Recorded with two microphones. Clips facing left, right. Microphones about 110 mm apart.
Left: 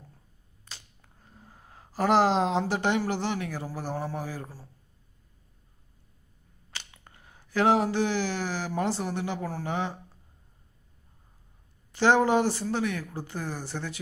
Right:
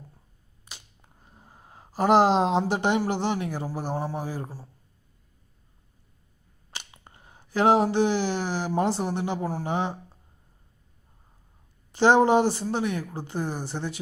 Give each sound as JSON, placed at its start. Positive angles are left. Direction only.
{"t": 0.6, "sound": "speech", "side_deg": -15}
{"t": 6.7, "sound": "speech", "side_deg": -25}
{"t": 11.9, "sound": "speech", "side_deg": -20}